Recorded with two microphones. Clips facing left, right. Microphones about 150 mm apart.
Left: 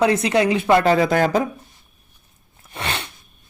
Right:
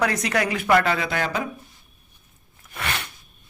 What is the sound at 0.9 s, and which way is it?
Speech, 40° left (ahead or behind).